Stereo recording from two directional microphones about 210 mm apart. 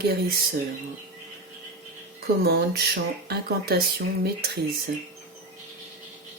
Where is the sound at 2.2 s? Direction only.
50° right (ahead or behind).